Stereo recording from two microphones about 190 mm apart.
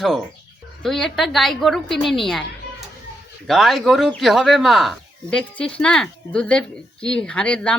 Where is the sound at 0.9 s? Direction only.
Centre (ahead or behind).